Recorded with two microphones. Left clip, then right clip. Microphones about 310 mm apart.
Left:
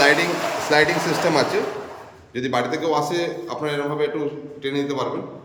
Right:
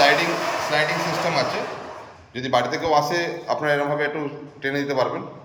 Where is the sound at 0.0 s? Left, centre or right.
Centre.